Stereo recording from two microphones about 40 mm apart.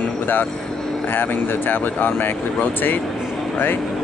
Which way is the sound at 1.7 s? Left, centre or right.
Left.